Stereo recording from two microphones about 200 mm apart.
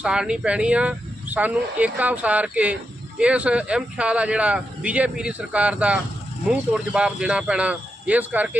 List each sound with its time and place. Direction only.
0.0 s speech: 5° right (ahead or behind)